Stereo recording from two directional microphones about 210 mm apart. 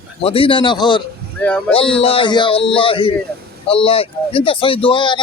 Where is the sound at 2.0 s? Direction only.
25° left (ahead or behind).